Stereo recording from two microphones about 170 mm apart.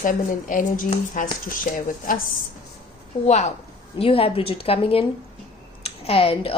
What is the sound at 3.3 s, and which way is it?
A woman's voice, 40° left (ahead or behind).